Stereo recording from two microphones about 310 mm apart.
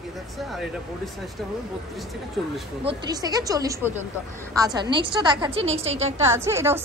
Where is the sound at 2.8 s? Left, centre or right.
Centre.